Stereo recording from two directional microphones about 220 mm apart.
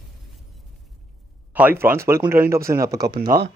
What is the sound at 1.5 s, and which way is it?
Speech, 10° right (ahead or behind).